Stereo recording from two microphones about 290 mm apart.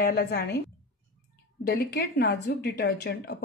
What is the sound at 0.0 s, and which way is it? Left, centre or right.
Speech, left.